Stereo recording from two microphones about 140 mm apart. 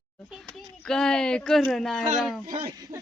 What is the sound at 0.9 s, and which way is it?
Speech, 5° left (ahead or behind).